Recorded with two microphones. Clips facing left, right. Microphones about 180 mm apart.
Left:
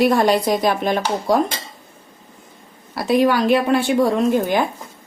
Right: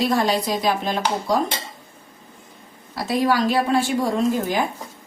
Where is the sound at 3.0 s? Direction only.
65° left (ahead or behind).